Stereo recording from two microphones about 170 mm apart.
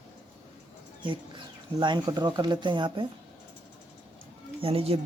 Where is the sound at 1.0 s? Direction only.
30° right (ahead or behind).